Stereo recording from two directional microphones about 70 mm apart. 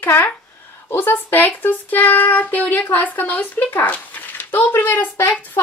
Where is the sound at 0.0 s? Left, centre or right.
Left.